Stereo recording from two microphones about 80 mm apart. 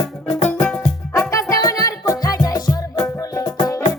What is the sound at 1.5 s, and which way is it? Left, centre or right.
Music, left.